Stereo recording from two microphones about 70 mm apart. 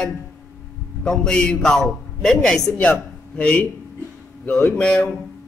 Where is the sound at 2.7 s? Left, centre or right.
Left.